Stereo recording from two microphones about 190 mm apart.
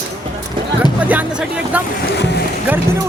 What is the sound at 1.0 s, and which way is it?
Music, 10° right (ahead or behind).